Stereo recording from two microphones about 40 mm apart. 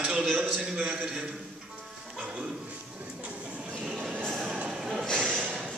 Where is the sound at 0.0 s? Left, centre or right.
Centre.